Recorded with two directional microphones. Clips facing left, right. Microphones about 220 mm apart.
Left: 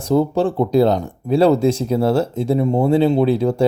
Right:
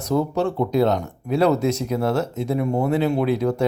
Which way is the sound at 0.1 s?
30° left (ahead or behind).